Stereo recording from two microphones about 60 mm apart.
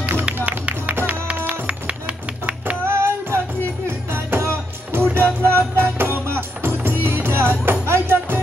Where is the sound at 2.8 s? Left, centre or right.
Right.